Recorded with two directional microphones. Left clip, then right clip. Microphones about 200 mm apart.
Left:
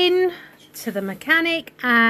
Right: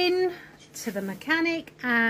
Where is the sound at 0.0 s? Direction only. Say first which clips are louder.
Left 6 dB; 25° left (ahead or behind).